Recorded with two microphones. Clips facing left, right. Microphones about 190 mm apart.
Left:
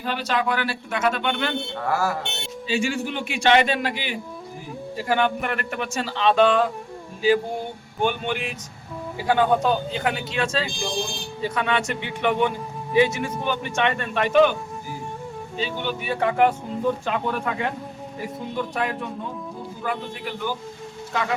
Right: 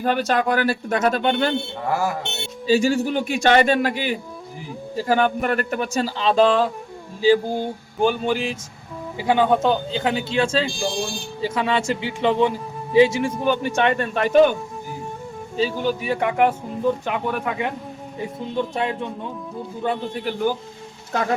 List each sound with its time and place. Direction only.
0.0 s speech: 45° right (ahead or behind)
1.9 s speech: 15° right (ahead or behind)
2.6 s speech: 40° right (ahead or behind)
9.1 s speech: 20° right (ahead or behind)
13.6 s speech: 35° right (ahead or behind)
15.5 s speech: 40° right (ahead or behind)
16.2 s speech: 15° right (ahead or behind)
20.2 s speech: 45° right (ahead or behind)